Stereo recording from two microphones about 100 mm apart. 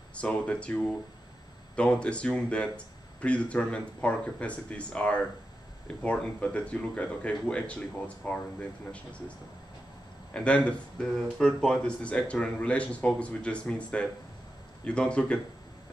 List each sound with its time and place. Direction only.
0.1 s speech: 10° left (ahead or behind)
10.3 s speech: 10° left (ahead or behind)